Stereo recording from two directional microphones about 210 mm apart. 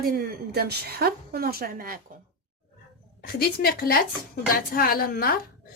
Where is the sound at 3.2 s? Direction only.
45° left (ahead or behind).